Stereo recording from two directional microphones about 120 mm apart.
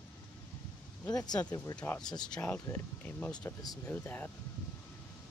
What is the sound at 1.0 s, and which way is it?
Speech, 30° left (ahead or behind).